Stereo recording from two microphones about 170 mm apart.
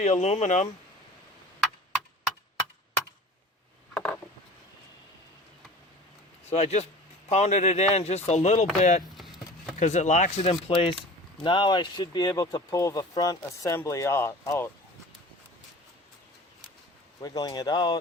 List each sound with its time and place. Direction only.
0.0 s speech: 40° left (ahead or behind)
6.5 s speech: 40° left (ahead or behind)
9.1 s a sound: centre (ahead or behind)
9.7 s speech: 45° left (ahead or behind); by 14.7 s 15° left (ahead or behind)
17.2 s speech: 20° left (ahead or behind)